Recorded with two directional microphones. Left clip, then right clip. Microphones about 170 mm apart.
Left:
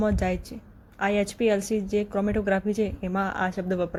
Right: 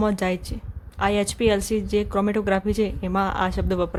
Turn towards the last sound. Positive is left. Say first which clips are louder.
# right 3 dB
turn(degrees=-15)  # may be behind; listen again after turning